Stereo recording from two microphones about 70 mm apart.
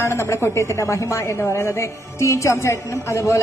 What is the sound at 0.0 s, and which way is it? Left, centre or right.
A woman's voice, left.